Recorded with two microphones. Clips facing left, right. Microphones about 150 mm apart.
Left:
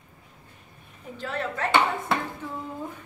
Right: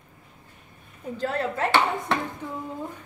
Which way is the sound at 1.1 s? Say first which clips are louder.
Right 4 dB; 35° right (ahead or behind).